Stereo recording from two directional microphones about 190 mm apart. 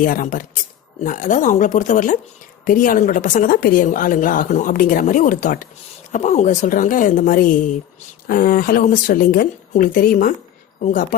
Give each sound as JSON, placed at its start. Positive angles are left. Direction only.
{"t": 0.0, "sound": "a woman's voice", "side_deg": 45}